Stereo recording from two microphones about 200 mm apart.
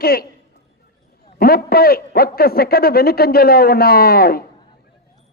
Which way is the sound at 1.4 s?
50° left (ahead or behind).